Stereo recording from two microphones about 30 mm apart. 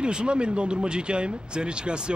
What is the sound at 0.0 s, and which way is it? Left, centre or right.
Speech, right.